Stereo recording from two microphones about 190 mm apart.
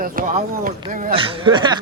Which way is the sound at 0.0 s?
45° right (ahead or behind).